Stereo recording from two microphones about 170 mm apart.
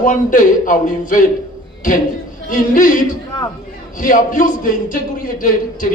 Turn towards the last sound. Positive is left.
turn(degrees=55)  # may be behind; listen again after turning